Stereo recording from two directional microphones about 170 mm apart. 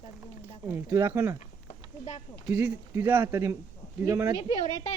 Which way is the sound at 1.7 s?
45° left (ahead or behind).